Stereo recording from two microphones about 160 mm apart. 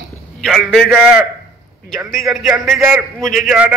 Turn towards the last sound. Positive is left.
turn(degrees=-5)  # may be behind; listen again after turning